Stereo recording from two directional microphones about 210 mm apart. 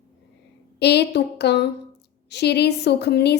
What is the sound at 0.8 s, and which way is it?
A woman's voice, 55° left (ahead or behind).